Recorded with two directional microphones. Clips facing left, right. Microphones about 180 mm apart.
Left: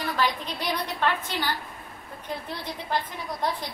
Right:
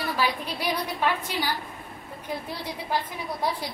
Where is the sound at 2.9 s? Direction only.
10° right (ahead or behind).